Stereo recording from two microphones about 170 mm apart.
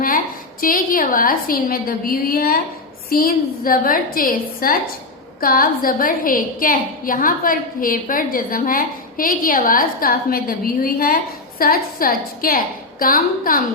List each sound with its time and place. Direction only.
0.6 s a woman's voice: 55° left (ahead or behind)